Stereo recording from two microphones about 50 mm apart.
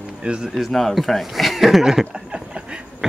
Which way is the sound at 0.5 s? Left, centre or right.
Centre.